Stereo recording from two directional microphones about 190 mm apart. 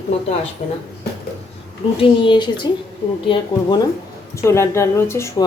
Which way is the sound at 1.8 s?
35° left (ahead or behind).